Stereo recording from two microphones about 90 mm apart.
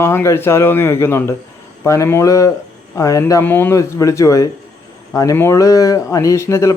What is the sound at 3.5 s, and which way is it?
Speech, 25° left (ahead or behind).